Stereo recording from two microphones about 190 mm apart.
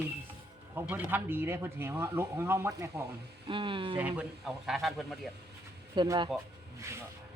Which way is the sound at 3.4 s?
25° right (ahead or behind).